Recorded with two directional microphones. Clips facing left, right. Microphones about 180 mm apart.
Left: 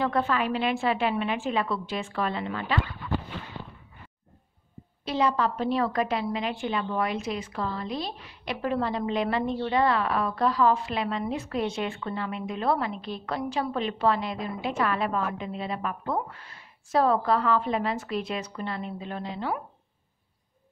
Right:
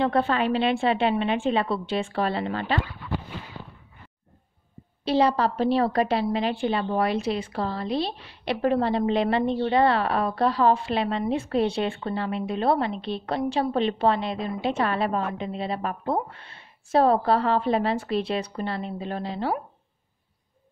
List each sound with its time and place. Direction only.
0.0 s a woman's voice: 30° right (ahead or behind)
5.0 s a woman's voice: 35° right (ahead or behind)